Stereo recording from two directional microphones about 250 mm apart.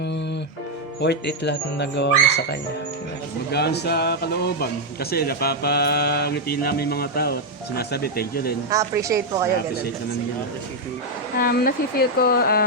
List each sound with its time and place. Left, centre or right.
1.0 s speech: left
8.7 s a woman's voice: centre
11.3 s speech: left